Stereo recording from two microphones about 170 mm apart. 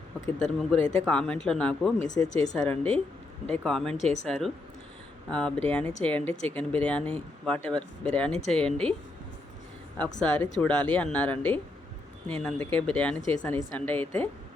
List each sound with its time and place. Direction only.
0.3 s speech: 5° left (ahead or behind)
3.9 s speech: 45° left (ahead or behind)
4.3 s speech: centre (ahead or behind)
10.2 s speech: 5° left (ahead or behind)